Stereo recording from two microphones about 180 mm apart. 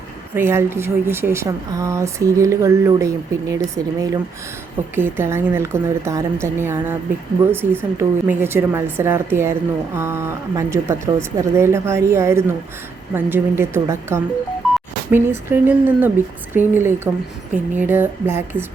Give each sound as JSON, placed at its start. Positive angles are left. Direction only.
{"t": 0.3, "sound": "a woman's voice", "side_deg": -15}